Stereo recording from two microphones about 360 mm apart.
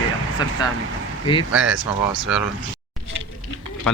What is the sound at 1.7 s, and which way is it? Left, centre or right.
Speech, right.